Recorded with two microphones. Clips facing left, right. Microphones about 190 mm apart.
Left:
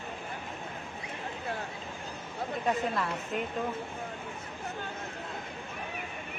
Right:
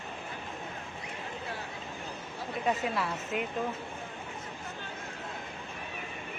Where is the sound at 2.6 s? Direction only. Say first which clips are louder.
Even; 5° right (ahead or behind).